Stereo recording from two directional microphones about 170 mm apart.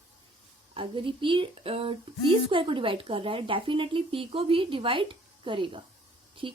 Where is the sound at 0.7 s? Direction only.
30° right (ahead or behind).